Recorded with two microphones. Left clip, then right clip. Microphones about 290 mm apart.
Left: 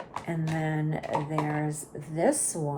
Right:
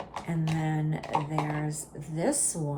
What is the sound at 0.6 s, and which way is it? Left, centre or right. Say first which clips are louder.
Speech: left 2 dB; centre.